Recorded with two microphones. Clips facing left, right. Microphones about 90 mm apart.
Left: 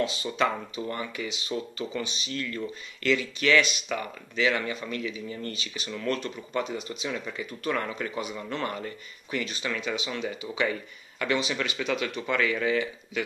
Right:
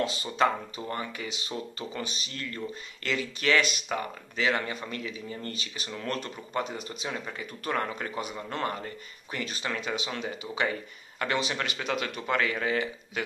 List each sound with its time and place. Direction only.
0.0 s speech: 35° right (ahead or behind)